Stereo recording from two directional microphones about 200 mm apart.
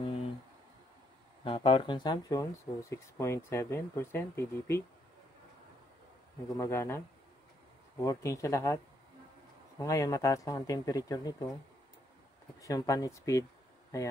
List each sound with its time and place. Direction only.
1.4 s speech: 25° left (ahead or behind)
6.5 s speech: 15° left (ahead or behind)
8.0 s speech: 15° left (ahead or behind)
12.6 s speech: 15° left (ahead or behind)